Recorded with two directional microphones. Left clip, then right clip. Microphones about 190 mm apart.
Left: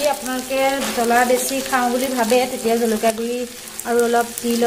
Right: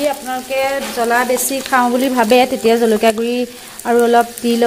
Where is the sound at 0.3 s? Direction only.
45° right (ahead or behind).